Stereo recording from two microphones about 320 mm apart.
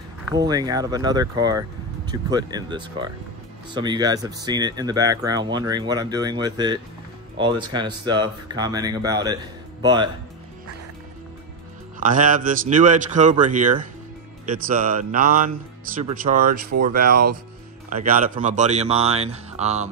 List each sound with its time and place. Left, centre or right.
0.3 s speech: centre
12.0 s speech: right